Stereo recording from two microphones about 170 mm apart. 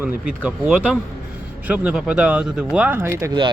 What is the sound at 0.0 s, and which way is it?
Speech, 10° right (ahead or behind).